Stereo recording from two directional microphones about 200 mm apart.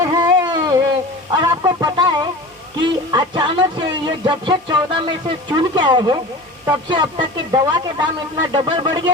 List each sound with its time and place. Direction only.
0.0 s a sound: 15° right (ahead or behind)
3.1 s music: 20° right (ahead or behind)
6.7 s speech: 20° right (ahead or behind)